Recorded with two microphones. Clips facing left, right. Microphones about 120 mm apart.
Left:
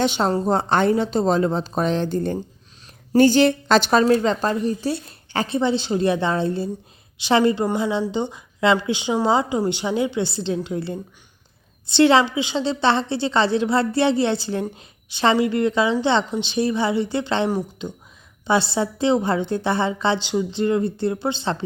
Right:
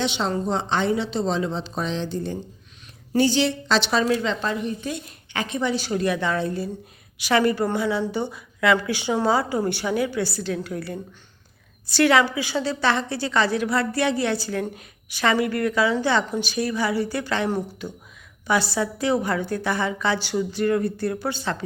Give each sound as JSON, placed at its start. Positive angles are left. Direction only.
{"t": 0.0, "sound": "a woman's voice", "side_deg": 45}